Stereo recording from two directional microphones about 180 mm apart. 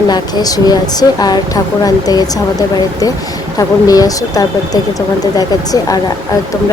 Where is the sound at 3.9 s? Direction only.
20° left (ahead or behind).